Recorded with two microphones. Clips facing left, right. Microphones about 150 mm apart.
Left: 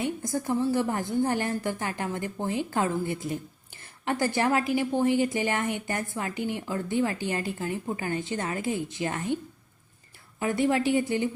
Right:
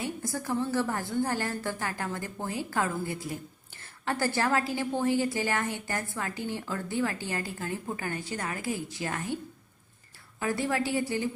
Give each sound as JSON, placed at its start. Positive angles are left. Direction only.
{"t": 0.0, "sound": "a woman's voice", "side_deg": 20}
{"t": 10.4, "sound": "a woman's voice", "side_deg": 20}